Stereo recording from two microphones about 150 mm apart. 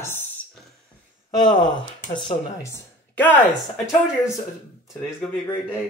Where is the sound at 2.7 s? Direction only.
10° left (ahead or behind).